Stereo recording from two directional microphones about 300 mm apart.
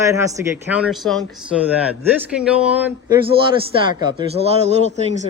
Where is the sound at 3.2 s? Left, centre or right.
Centre.